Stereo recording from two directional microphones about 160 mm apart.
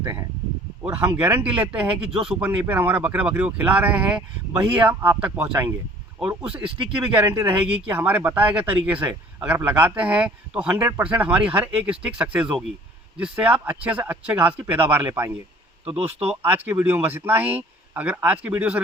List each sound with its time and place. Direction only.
0.0 s speech: 15° right (ahead or behind)